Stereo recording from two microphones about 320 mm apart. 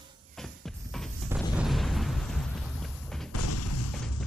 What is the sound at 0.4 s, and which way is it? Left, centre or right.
Music, centre.